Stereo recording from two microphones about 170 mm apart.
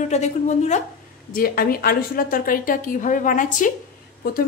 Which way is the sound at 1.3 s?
60° left (ahead or behind).